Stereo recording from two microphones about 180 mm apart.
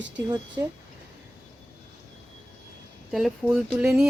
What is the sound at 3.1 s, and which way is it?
Speech, centre (ahead or behind).